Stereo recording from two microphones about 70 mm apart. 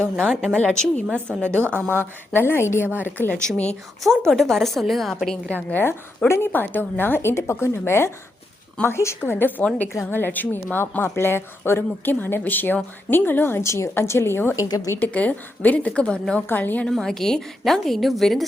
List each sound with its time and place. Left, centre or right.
0.5 s a woman's voice: centre
1.9 s a woman's voice: left
3.0 s a woman's voice: left
3.3 s a woman's voice: centre
5.5 s a woman's voice: left
14.9 s a woman's voice: left
16.5 s a woman's voice: left
16.8 s a woman's voice: centre